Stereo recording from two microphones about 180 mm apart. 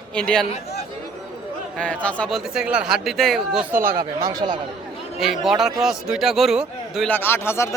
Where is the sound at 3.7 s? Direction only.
10° right (ahead or behind).